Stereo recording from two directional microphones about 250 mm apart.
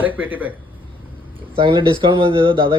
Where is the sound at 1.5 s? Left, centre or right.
Centre.